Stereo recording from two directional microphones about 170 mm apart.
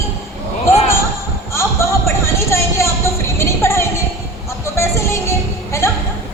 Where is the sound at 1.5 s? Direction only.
15° left (ahead or behind).